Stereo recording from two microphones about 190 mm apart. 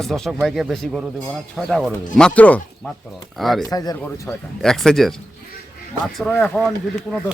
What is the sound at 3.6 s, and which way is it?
Speech, 20° left (ahead or behind).